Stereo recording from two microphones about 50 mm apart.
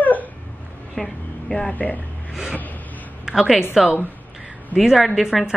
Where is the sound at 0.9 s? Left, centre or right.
Centre.